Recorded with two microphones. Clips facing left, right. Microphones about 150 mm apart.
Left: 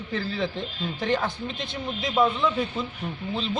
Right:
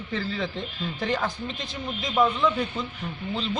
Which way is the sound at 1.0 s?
Centre (ahead or behind).